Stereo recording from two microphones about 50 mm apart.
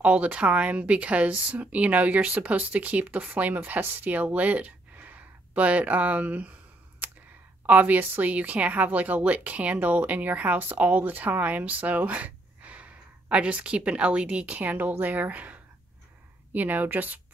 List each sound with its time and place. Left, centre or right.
0.0 s a woman's voice: right
7.0 s a sound: right
7.6 s a woman's voice: right